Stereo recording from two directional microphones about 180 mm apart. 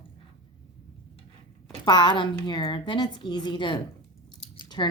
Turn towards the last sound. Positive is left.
turn(degrees=25)  # may be behind; listen again after turning